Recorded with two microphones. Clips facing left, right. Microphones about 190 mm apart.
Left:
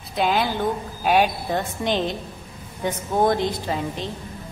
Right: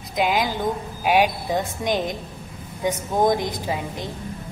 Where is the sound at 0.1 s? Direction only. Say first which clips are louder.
Even; 15° right (ahead or behind).